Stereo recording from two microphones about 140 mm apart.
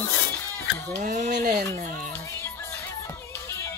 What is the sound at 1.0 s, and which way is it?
Speech, 60° right (ahead or behind).